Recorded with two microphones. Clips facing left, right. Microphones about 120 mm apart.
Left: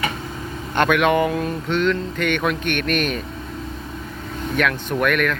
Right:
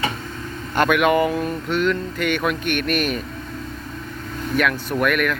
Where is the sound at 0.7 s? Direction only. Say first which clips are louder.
Even; 5° right (ahead or behind).